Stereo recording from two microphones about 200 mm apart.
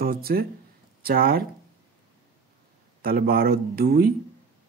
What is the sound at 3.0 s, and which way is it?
Speech, 50° right (ahead or behind).